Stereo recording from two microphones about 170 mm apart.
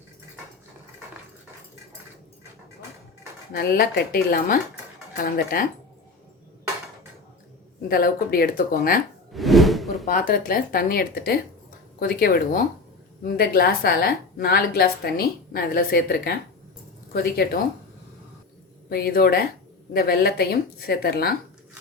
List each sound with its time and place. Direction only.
3.5 s a woman's voice: 65° left (ahead or behind)
7.9 s a woman's voice: 60° left (ahead or behind)
9.3 s drawer open or close: centre (ahead or behind)
10.1 s a woman's voice: 55° left (ahead or behind)
18.9 s a woman's voice: 65° left (ahead or behind)